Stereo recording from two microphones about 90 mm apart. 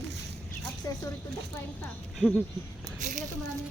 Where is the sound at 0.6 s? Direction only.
40° left (ahead or behind).